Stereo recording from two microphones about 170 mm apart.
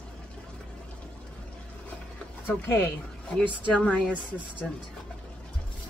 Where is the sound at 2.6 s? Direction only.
15° left (ahead or behind).